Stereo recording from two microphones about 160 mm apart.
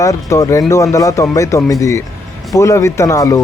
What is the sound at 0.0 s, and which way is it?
Speech, 20° left (ahead or behind).